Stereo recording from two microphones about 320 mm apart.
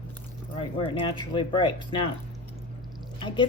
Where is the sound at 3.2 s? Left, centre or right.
Centre.